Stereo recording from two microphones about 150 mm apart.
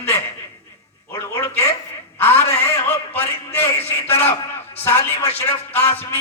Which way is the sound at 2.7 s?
15° left (ahead or behind).